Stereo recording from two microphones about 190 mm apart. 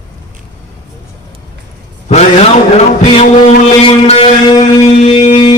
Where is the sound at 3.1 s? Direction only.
30° left (ahead or behind).